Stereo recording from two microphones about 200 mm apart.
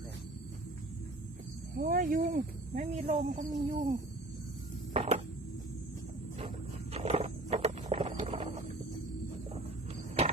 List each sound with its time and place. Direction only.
1.7 s speech: 45° right (ahead or behind)
4.9 s a sound: 30° right (ahead or behind)
6.9 s wild animals: 30° right (ahead or behind)